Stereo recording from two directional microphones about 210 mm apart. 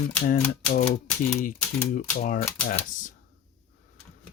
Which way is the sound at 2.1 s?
40° left (ahead or behind).